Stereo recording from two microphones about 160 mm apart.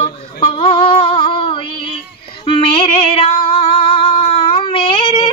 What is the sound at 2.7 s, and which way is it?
Female singing, 35° left (ahead or behind).